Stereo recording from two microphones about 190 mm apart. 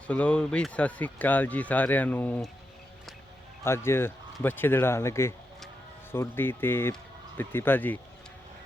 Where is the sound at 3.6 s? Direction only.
15° left (ahead or behind).